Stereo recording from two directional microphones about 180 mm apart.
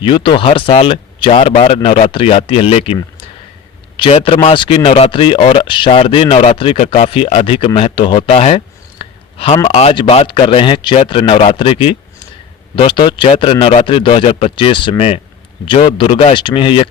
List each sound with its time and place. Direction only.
0.0 s a man's voice: 30° left (ahead or behind)